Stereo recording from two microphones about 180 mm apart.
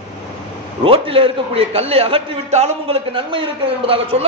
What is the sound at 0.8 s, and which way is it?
A man's voice, 30° right (ahead or behind).